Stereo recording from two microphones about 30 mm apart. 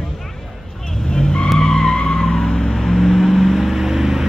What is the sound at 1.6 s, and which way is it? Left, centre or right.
Skidding, centre.